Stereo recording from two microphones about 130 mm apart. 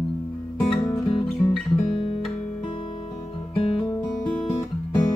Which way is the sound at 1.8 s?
50° left (ahead or behind).